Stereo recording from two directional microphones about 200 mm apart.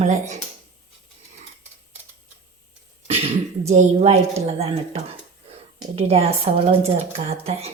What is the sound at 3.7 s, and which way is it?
A woman's voice, 35° right (ahead or behind).